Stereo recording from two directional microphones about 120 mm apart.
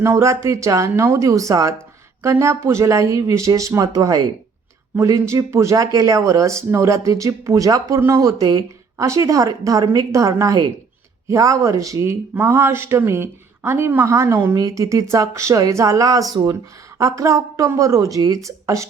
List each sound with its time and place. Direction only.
0.0 s a woman's voice: 25° right (ahead or behind)